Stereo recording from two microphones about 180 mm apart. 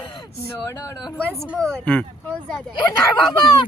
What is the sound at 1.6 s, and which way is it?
Speech, 5° left (ahead or behind).